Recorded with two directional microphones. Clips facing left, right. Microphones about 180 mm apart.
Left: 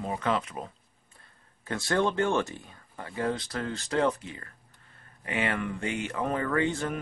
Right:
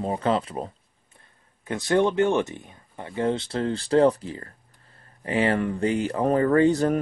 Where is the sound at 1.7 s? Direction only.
20° right (ahead or behind); by 6.9 s 40° right (ahead or behind).